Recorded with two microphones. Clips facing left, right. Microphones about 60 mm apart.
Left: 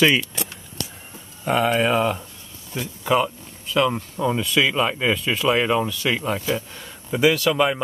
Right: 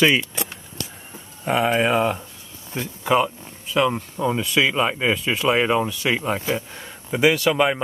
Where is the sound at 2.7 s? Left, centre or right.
Right.